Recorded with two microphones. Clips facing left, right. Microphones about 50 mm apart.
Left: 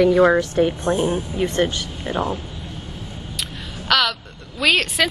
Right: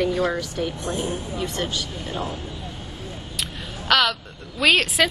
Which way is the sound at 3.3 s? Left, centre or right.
Centre.